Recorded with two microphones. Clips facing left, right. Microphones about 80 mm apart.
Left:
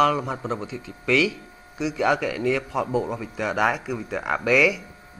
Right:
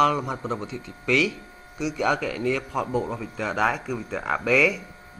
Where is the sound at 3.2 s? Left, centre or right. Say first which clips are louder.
Left 1 dB; left.